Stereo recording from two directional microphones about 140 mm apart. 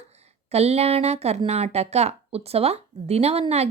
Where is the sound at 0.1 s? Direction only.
50° right (ahead or behind).